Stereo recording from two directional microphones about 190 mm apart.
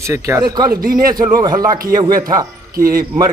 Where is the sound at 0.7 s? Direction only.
50° right (ahead or behind).